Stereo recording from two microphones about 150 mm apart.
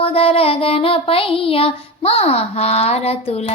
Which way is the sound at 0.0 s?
40° left (ahead or behind).